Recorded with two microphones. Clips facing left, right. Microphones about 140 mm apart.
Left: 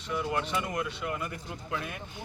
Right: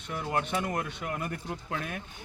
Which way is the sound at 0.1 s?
45° right (ahead or behind).